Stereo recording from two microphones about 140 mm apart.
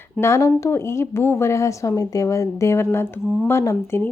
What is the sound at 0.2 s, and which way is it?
A woman's voice, 20° left (ahead or behind).